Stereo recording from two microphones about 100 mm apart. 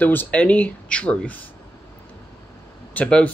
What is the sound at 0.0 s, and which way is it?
Speech, 20° left (ahead or behind).